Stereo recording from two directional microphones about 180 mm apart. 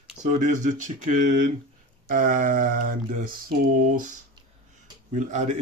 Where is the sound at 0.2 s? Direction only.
40° right (ahead or behind).